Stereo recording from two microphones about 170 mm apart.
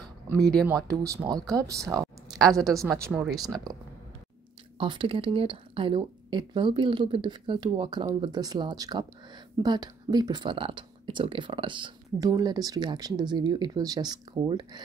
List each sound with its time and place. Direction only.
0.4 s speech: 5° left (ahead or behind)
1.5 s speech: 20° right (ahead or behind)
2.3 s speech: centre (ahead or behind)
4.7 s speech: 30° right (ahead or behind)